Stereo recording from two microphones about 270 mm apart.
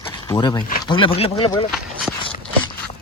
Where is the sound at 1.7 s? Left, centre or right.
Centre.